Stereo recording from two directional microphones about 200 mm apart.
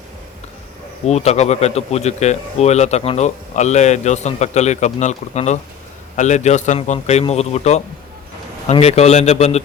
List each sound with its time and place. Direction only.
1.0 s speech: 35° left (ahead or behind)